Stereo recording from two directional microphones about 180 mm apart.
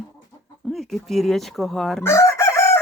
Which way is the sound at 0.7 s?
Centre (ahead or behind).